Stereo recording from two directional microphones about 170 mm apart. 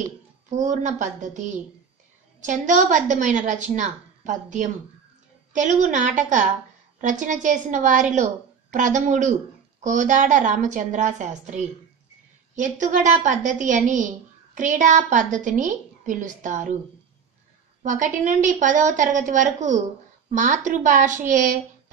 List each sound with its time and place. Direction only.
0.5 s a woman's voice: 45° right (ahead or behind)
17.8 s a woman's voice: 50° right (ahead or behind)